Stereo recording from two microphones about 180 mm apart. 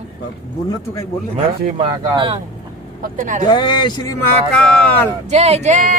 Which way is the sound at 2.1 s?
30° right (ahead or behind).